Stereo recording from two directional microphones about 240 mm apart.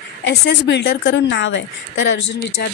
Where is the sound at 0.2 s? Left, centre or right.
Left.